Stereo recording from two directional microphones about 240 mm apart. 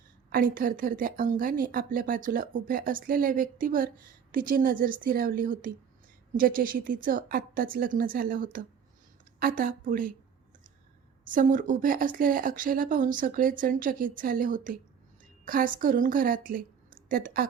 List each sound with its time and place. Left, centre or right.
0.3 s speech: right
11.3 s a woman's voice: right